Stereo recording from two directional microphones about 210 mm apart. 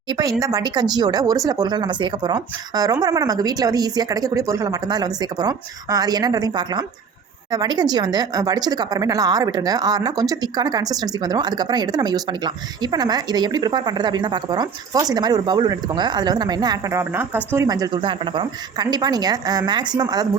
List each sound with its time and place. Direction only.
0.1 s speech: 15° right (ahead or behind)